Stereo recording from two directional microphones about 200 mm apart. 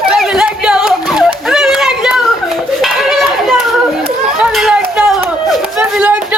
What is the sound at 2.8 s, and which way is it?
Children playing, centre (ahead or behind).